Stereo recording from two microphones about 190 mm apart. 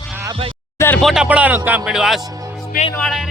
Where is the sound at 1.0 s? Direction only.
Centre (ahead or behind).